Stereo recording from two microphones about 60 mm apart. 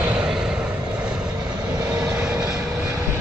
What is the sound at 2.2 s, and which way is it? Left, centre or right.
Vehicle, centre.